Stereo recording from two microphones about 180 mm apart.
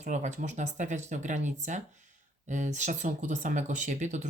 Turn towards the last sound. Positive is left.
turn(degrees=-40)  # may be behind; listen again after turning